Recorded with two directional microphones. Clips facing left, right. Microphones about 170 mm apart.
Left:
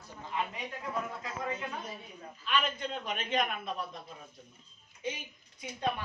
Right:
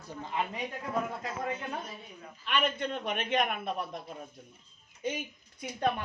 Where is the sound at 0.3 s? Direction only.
35° right (ahead or behind).